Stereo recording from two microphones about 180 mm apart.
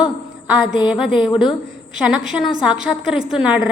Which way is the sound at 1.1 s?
25° left (ahead or behind).